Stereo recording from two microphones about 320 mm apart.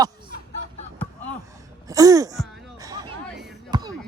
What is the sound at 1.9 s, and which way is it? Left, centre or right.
Throat clearing, centre.